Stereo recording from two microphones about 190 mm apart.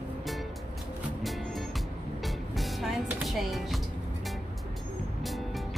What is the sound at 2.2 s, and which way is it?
Music, centre (ahead or behind).